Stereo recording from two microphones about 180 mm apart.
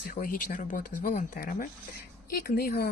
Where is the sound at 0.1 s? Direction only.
50° left (ahead or behind).